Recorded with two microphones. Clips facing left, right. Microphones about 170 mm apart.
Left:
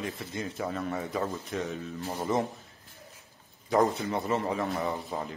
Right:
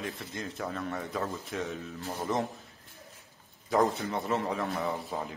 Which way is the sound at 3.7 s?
Centre (ahead or behind).